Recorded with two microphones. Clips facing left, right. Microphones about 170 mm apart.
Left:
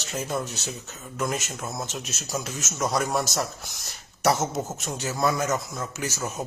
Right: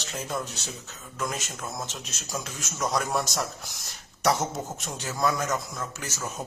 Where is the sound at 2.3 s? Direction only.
5° left (ahead or behind).